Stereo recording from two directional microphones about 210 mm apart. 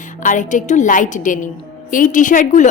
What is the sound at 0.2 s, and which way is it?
A woman's voice, 35° left (ahead or behind).